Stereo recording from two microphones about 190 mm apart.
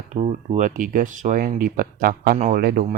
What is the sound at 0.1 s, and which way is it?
Speech, 35° right (ahead or behind).